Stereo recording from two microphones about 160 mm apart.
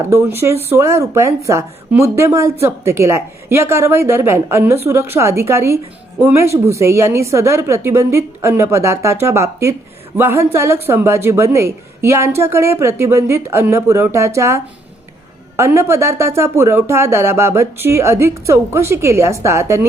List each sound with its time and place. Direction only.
0.0 s a woman's voice: 15° right (ahead or behind)